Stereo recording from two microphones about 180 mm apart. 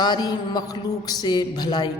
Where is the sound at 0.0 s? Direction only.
25° left (ahead or behind).